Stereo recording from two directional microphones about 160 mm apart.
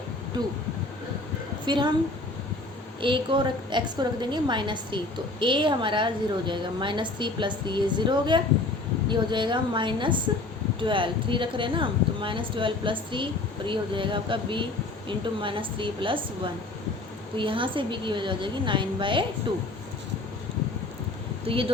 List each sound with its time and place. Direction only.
1.6 s a woman's voice: 30° right (ahead or behind)
3.0 s a woman's voice: 30° right (ahead or behind)
21.4 s speech: 35° right (ahead or behind)